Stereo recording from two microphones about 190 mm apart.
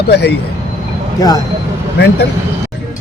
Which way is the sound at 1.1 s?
20° left (ahead or behind).